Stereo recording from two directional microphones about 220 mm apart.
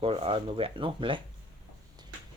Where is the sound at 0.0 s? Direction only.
25° right (ahead or behind).